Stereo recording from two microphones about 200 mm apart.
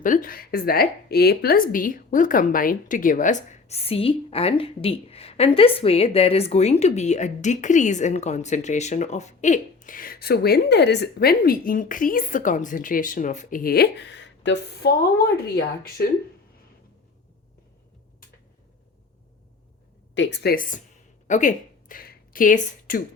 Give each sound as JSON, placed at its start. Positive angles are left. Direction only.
{"t": 0.0, "sound": "a woman's voice", "side_deg": 45}
{"t": 20.1, "sound": "a woman's voice", "side_deg": 55}